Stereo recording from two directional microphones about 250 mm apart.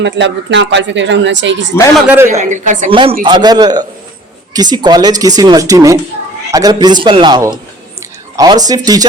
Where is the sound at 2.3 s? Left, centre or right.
Right.